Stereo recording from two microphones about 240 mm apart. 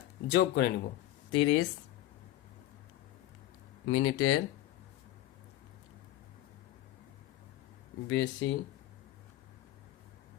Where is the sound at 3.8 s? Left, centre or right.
Left.